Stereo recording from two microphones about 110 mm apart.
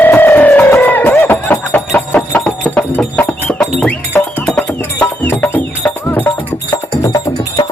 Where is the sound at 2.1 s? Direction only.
5° left (ahead or behind).